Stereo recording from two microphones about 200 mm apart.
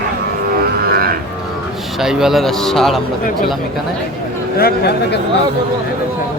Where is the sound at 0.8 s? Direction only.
50° right (ahead or behind).